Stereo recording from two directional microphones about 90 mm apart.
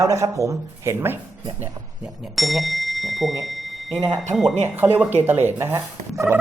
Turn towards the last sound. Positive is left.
turn(degrees=-30)  # may be behind; listen again after turning